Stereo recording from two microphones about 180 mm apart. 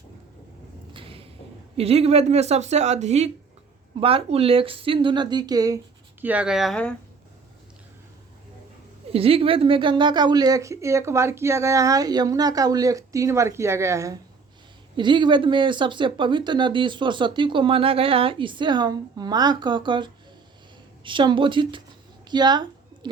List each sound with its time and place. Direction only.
0.9 s a sound: 30° right (ahead or behind)
1.7 s speech: 35° right (ahead or behind)
6.2 s speech: 5° right (ahead or behind)
9.1 s speech: 30° right (ahead or behind)